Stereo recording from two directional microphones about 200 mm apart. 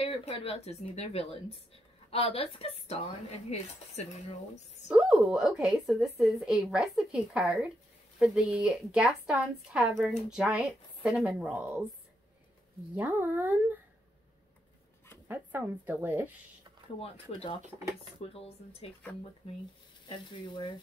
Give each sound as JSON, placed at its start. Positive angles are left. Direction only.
{"t": 0.0, "sound": "a woman's voice", "side_deg": 30}
{"t": 4.8, "sound": "speech", "side_deg": -5}
{"t": 12.9, "sound": "a woman's voice", "side_deg": -10}
{"t": 15.2, "sound": "a woman's voice", "side_deg": -10}
{"t": 17.0, "sound": "speech", "side_deg": 30}
{"t": 20.1, "sound": "speech", "side_deg": 25}